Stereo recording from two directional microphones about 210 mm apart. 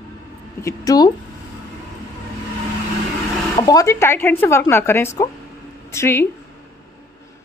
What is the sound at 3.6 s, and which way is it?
A woman's voice, 15° left (ahead or behind).